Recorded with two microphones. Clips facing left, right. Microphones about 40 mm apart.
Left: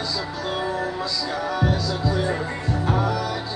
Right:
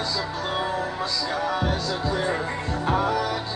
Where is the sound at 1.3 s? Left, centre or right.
Right.